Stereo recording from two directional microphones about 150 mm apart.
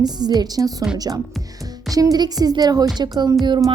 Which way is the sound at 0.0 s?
30° right (ahead or behind).